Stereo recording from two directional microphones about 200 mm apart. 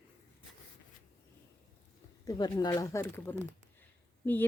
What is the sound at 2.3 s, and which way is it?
Speech, 20° left (ahead or behind).